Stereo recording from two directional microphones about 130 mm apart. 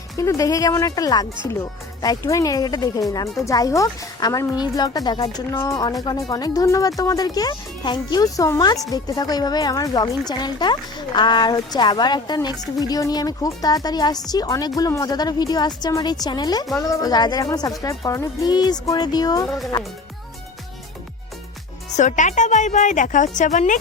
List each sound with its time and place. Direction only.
0.2 s speech: 25° left (ahead or behind)
19.5 s speech: centre (ahead or behind)
21.9 s a woman's voice: 70° left (ahead or behind)